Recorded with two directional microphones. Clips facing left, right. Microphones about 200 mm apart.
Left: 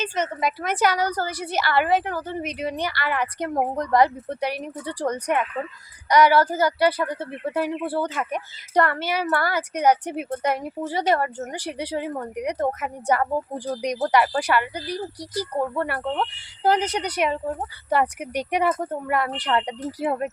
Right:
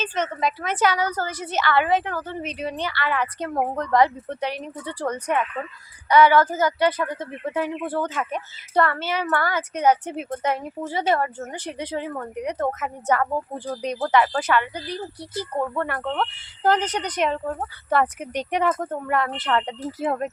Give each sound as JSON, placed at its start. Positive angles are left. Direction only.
{"t": 0.0, "sound": "speech", "side_deg": 10}
{"t": 0.9, "sound": "a woman's voice", "side_deg": 40}
{"t": 1.3, "sound": "speech", "side_deg": 10}